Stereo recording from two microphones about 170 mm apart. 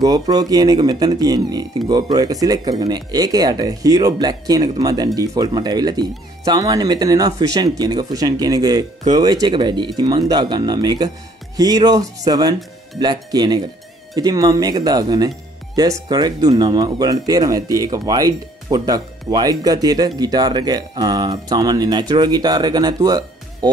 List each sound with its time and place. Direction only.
0.0 s speech: 25° right (ahead or behind)